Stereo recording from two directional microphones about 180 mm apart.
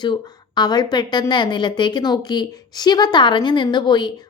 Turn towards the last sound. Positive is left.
turn(degrees=25)  # may be behind; listen again after turning